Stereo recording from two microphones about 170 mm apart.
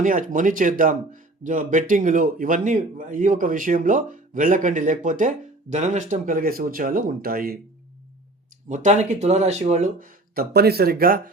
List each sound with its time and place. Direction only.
0.0 s speech: 50° right (ahead or behind)
8.7 s speech: 45° right (ahead or behind)